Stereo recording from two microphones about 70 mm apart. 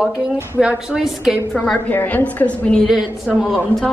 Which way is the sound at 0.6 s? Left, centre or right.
Centre.